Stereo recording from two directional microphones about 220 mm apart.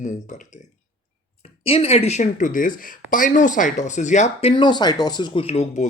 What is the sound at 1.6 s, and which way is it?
Speech, 25° left (ahead or behind).